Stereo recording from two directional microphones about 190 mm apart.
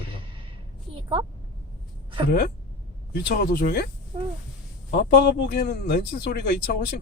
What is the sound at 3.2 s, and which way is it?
Speech, 55° left (ahead or behind).